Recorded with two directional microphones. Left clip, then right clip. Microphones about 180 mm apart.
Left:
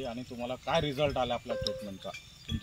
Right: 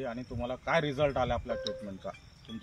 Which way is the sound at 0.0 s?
Centre (ahead or behind).